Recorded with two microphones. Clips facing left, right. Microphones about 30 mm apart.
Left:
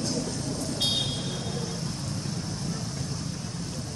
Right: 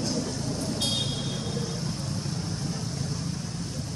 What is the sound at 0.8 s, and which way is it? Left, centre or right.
Vehicle, centre.